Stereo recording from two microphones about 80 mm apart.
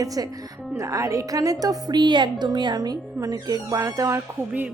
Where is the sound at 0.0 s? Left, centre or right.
Right.